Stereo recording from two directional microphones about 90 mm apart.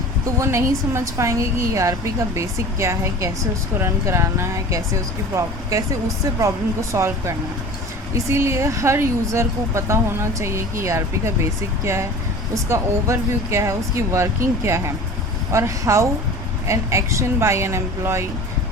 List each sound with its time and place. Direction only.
0.3 s a woman's voice: 35° right (ahead or behind)
12.5 s a woman's voice: 35° right (ahead or behind)